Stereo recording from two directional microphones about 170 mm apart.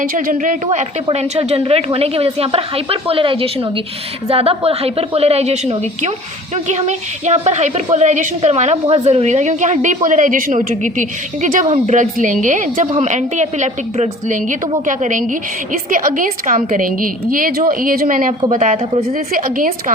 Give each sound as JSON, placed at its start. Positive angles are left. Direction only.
{"t": 0.0, "sound": "a woman's voice", "side_deg": -55}
{"t": 1.0, "sound": "a woman's voice", "side_deg": -35}
{"t": 18.5, "sound": "a woman's voice", "side_deg": -45}